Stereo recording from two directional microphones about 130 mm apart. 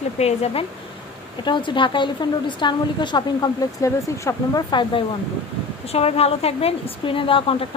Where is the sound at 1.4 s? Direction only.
35° left (ahead or behind).